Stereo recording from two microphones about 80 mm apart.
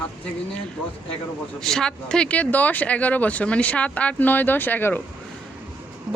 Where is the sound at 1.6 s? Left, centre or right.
Centre; by 5.0 s left.